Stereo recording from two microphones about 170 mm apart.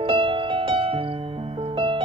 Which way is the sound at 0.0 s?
30° right (ahead or behind).